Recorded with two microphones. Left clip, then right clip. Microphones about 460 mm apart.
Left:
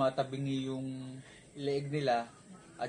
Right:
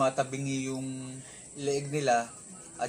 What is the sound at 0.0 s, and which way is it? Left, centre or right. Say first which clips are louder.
A man's voice: right 4 dB; left.